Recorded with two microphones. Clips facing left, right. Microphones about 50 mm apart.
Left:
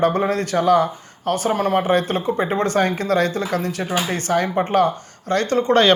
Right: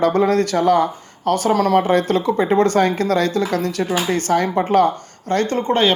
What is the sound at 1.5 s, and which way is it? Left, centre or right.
Speech, right.